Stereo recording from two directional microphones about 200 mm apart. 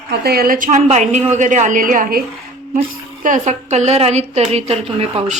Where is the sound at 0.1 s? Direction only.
50° right (ahead or behind).